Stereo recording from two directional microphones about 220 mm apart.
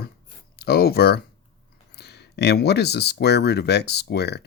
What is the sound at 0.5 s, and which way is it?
Speech, 45° left (ahead or behind).